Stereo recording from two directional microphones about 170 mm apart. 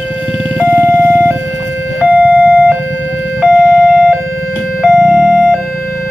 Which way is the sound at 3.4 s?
Centre (ahead or behind).